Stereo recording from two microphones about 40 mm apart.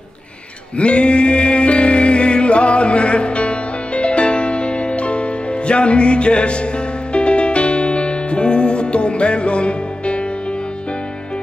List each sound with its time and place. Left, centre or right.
0.7 s music: left